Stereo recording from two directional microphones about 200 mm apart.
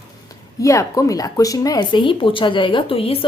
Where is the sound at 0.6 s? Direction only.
15° left (ahead or behind).